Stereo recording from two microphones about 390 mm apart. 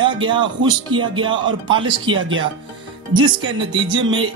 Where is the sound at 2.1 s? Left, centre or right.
Right.